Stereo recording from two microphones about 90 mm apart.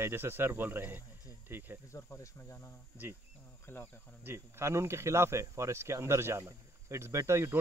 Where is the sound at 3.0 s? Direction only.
20° right (ahead or behind).